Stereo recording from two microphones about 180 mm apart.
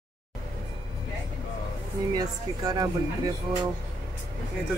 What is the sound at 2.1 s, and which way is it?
Speech, 20° right (ahead or behind).